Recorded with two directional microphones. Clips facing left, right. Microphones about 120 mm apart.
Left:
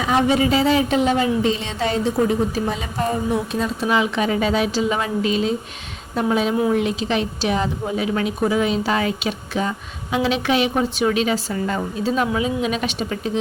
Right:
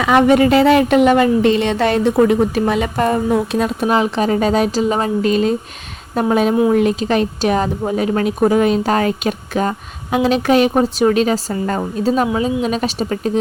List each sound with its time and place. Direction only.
0.0 s a woman's voice: 65° right (ahead or behind)
3.8 s speech: 40° right (ahead or behind)